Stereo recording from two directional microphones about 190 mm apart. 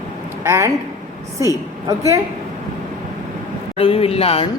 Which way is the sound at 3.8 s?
30° left (ahead or behind).